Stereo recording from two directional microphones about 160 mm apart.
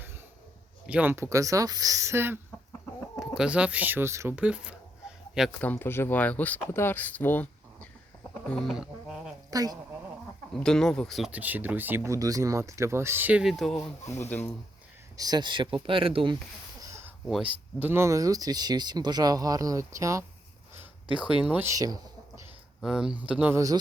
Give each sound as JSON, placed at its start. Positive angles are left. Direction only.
{"t": 0.9, "sound": "speech", "side_deg": -10}
{"t": 5.5, "sound": "speech", "side_deg": 10}
{"t": 8.3, "sound": "a sound", "side_deg": 5}
{"t": 9.5, "sound": "speech", "side_deg": -25}
{"t": 10.5, "sound": "speech", "side_deg": 5}
{"t": 14.1, "sound": "speech", "side_deg": 15}
{"t": 15.1, "sound": "speech", "side_deg": -25}
{"t": 17.2, "sound": "speech", "side_deg": 0}
{"t": 17.7, "sound": "speech", "side_deg": -15}
{"t": 21.2, "sound": "speech", "side_deg": -10}
{"t": 22.8, "sound": "speech", "side_deg": -5}